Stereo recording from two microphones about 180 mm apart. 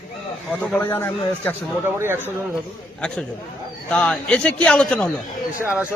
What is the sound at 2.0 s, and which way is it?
Speech, 15° right (ahead or behind).